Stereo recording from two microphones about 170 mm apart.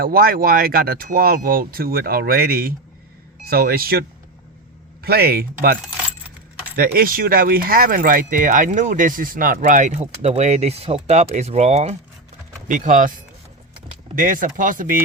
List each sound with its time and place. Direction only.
0.0 s speech: 60° right (ahead or behind)
5.0 s speech: 65° right (ahead or behind); by 13.1 s 50° right (ahead or behind)
14.2 s speech: 55° right (ahead or behind)